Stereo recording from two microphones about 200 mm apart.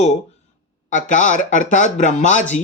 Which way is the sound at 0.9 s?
40° left (ahead or behind).